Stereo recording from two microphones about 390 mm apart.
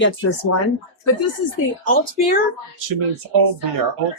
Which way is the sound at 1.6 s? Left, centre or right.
Left.